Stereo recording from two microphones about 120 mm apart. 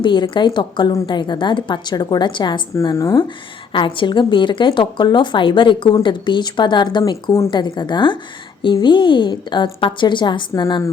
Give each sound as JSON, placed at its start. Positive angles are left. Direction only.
{"t": 0.0, "sound": "a woman's voice", "side_deg": 40}
{"t": 2.9, "sound": "speech", "side_deg": 25}
{"t": 3.2, "sound": "a woman's voice", "side_deg": 45}